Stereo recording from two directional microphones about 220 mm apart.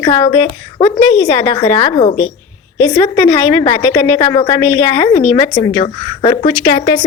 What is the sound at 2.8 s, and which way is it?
A woman's voice, 15° left (ahead or behind).